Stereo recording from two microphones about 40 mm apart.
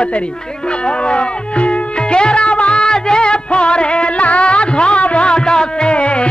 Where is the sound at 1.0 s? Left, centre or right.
Left.